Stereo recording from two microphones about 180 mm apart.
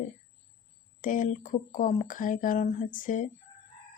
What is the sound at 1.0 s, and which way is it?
Speech, 45° left (ahead or behind).